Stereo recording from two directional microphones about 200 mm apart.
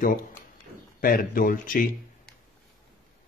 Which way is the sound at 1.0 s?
45° left (ahead or behind).